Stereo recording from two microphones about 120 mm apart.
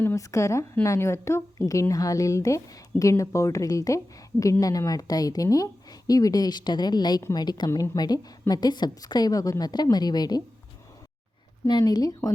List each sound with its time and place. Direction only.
0.0 s a woman's voice: 25° left (ahead or behind)
11.7 s a woman's voice: 35° left (ahead or behind)